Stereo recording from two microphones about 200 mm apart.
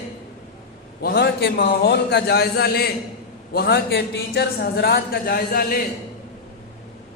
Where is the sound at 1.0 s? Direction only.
55° left (ahead or behind).